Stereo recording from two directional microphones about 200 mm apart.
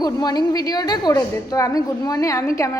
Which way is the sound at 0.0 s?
20° left (ahead or behind).